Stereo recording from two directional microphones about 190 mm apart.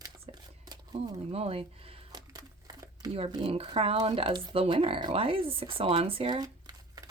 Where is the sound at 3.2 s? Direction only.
25° right (ahead or behind).